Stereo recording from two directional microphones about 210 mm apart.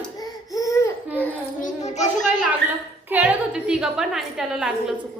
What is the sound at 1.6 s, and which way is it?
Speech, 35° left (ahead or behind).